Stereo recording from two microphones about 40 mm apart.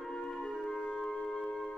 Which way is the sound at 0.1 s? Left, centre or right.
Centre.